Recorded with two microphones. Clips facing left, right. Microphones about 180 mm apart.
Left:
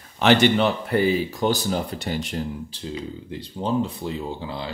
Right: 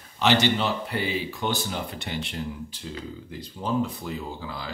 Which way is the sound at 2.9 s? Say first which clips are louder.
Left 7 dB; 25° left (ahead or behind).